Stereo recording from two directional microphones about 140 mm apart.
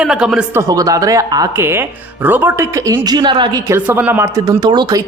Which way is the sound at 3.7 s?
10° right (ahead or behind).